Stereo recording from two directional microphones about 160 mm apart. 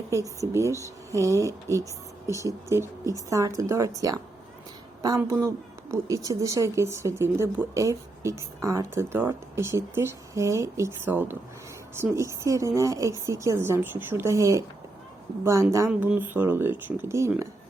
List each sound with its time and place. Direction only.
0.1 s speech: 20° right (ahead or behind)
15.9 s speech: 10° right (ahead or behind)